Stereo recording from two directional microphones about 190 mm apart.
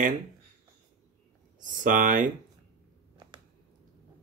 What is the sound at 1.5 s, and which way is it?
Speech, 45° right (ahead or behind).